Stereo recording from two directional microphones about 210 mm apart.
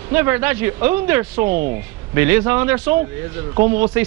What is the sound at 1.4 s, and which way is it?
Speech, 40° right (ahead or behind).